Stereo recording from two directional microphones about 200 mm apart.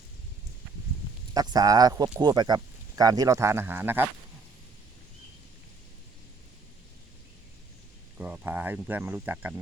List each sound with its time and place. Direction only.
1.3 s speech: 20° right (ahead or behind)
8.2 s speech: 10° right (ahead or behind)